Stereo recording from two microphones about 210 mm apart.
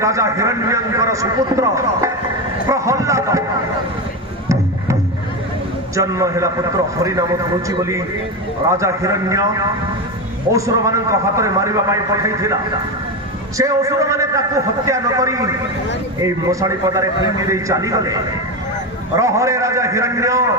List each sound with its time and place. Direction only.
0.0 s a man's voice: 15° right (ahead or behind)
6.0 s a man's voice: 15° right (ahead or behind)
10.5 s a man's voice: 15° right (ahead or behind)
13.6 s a man's voice: 15° right (ahead or behind)